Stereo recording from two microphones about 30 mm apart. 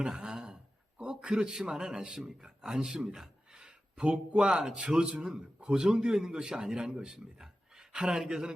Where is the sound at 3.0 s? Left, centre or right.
Centre.